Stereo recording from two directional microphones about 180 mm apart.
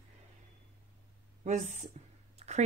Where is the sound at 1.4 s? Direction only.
40° right (ahead or behind).